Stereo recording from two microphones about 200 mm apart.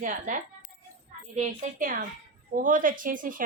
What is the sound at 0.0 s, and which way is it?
Speech, 40° right (ahead or behind).